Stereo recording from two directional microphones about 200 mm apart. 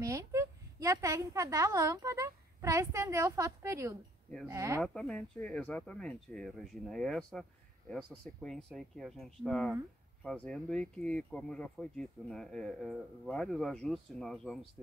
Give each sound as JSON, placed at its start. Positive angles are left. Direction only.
{"t": 0.0, "sound": "a woman's voice", "side_deg": -15}
{"t": 4.8, "sound": "speech", "side_deg": 5}